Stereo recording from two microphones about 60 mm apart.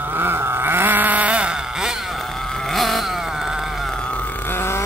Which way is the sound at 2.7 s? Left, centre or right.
Centre.